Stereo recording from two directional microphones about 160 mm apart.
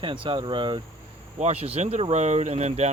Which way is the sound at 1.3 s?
40° right (ahead or behind).